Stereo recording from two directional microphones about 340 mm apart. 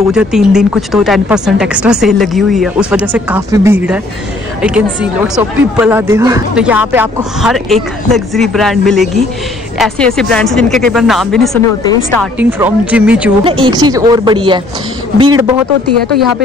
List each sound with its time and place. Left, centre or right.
0.1 s speech: centre
13.4 s speech: centre